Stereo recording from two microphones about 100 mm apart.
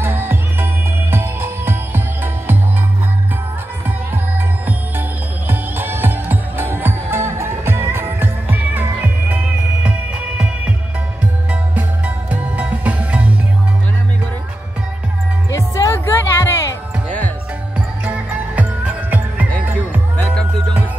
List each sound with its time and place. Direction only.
0.0 s music: 25° right (ahead or behind)
5.5 s music: 20° right (ahead or behind)
12.3 s music: 15° right (ahead or behind)
15.5 s music: 30° left (ahead or behind)
17.7 s music: 15° right (ahead or behind)